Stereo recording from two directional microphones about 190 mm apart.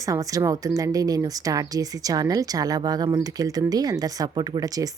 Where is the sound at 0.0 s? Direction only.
15° right (ahead or behind).